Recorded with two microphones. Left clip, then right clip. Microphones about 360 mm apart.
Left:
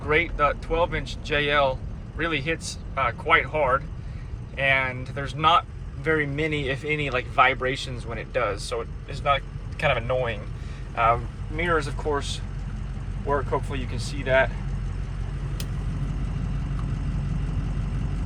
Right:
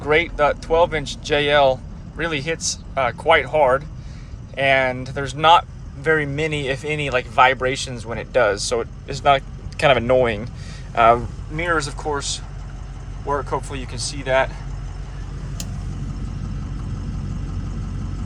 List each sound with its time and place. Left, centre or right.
0.0 s speech: centre
9.9 s speech: right
11.5 s speech: centre